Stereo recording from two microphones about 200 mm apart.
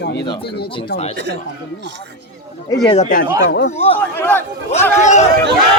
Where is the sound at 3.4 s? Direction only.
55° left (ahead or behind).